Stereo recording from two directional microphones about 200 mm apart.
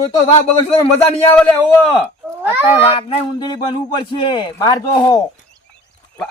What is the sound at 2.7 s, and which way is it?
A man's voice, 30° left (ahead or behind).